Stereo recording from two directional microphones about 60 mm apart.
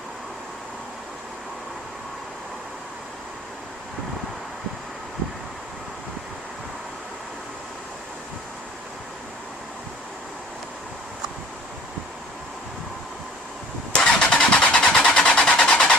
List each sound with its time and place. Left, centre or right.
13.9 s vehicle: centre